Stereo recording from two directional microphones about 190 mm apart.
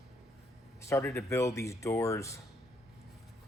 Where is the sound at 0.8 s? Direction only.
15° left (ahead or behind).